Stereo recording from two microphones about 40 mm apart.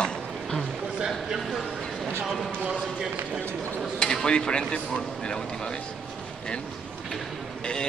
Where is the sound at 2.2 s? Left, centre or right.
Centre.